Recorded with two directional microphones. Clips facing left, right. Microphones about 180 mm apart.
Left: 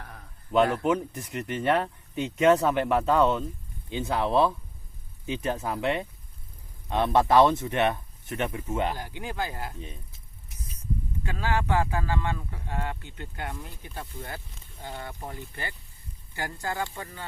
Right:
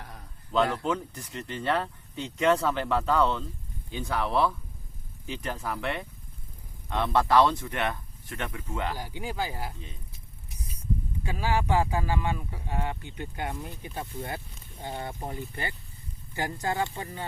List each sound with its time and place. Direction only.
0.5 s speech: 15° left (ahead or behind)
9.2 s speech: 10° right (ahead or behind)
11.3 s speech: 10° right (ahead or behind)